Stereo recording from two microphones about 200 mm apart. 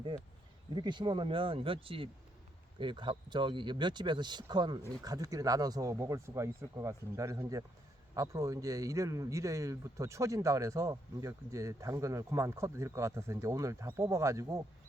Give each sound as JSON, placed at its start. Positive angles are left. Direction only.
{"t": 0.7, "sound": "a man's voice", "side_deg": -25}